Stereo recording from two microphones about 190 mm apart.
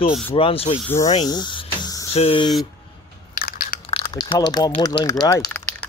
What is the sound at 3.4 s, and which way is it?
Biting, 50° left (ahead or behind).